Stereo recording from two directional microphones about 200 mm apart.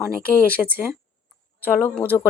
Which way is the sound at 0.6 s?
10° right (ahead or behind).